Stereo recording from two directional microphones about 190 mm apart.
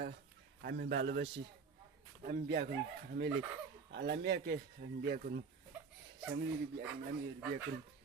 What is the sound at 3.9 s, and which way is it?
Speech, 65° right (ahead or behind).